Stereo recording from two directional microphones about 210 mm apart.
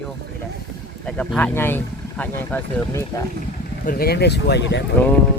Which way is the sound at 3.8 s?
45° left (ahead or behind).